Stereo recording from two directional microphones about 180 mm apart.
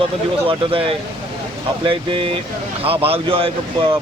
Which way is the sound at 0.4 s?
30° right (ahead or behind).